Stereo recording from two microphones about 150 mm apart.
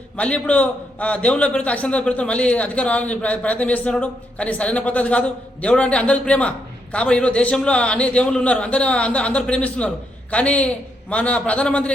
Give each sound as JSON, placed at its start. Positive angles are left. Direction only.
{"t": 0.2, "sound": "a man's voice", "side_deg": 10}